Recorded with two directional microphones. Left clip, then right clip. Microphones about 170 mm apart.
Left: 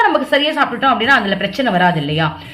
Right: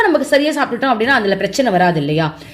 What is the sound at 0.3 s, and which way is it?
A woman's voice, 55° right (ahead or behind).